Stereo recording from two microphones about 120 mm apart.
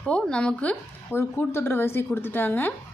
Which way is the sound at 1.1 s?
20° left (ahead or behind).